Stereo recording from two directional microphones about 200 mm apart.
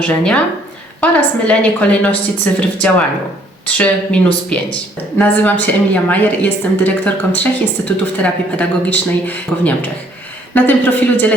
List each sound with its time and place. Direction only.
0.0 s speech: 5° left (ahead or behind)